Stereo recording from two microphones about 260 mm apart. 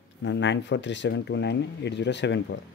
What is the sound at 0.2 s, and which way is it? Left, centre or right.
Speech, left.